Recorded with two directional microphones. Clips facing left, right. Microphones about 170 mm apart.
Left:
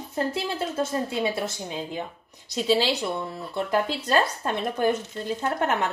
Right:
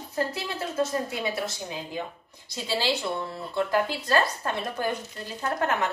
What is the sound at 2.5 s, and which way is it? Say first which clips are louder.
Speech: left 5 dB; 20° left (ahead or behind).